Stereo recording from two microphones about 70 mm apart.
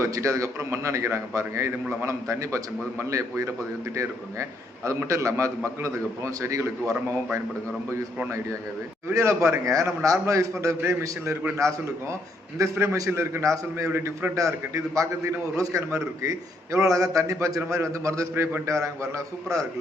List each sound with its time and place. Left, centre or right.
0.0 s a man's voice: right
4.9 s a man's voice: right
9.1 s a man's voice: right
11.6 s a man's voice: right
12.7 s a man's voice: right
13.4 s a man's voice: right
14.3 s a man's voice: right